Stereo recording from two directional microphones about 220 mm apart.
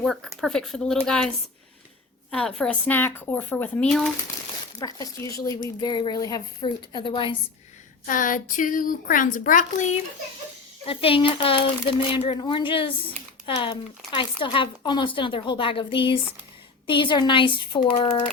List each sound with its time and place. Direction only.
0.0 s speech: centre (ahead or behind)
2.3 s speech: 5° left (ahead or behind)
4.8 s speech: 15° left (ahead or behind)
8.0 s a woman's voice: 35° left (ahead or behind)
10.8 s speech: 25° left (ahead or behind)